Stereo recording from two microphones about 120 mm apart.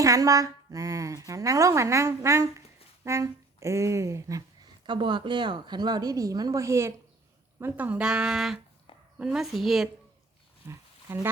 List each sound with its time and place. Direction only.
0.0 s a woman's voice: 30° right (ahead or behind)
4.9 s a woman's voice: 40° right (ahead or behind); by 9.9 s centre (ahead or behind)
10.7 s a sound: 20° right (ahead or behind)